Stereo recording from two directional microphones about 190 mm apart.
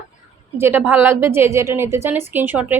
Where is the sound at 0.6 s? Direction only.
10° right (ahead or behind).